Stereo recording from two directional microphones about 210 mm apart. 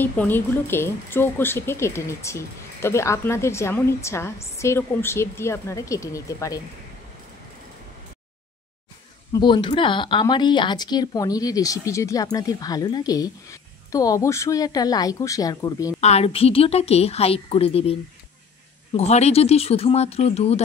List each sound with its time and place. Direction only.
0.0 s speech: 10° left (ahead or behind)
9.3 s speech: 20° left (ahead or behind)
16.0 s a woman's voice: 30° left (ahead or behind)
18.9 s a woman's voice: 30° left (ahead or behind)